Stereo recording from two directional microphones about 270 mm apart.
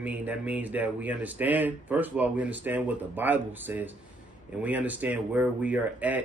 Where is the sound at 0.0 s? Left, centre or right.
Centre.